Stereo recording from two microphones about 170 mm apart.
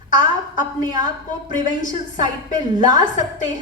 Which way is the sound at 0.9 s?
50° left (ahead or behind).